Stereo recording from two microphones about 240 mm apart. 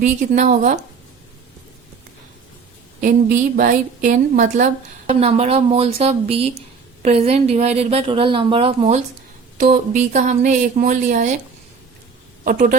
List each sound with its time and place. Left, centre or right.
0.0 s a woman's voice: right
3.0 s a woman's voice: right
12.5 s speech: right